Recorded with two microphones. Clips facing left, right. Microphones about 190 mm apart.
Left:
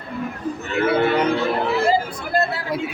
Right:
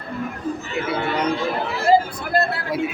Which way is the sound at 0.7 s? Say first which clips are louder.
Left 8 dB; 60° left (ahead or behind).